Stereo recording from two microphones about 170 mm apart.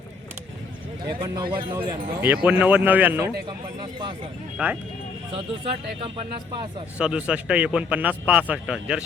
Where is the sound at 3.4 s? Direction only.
25° right (ahead or behind).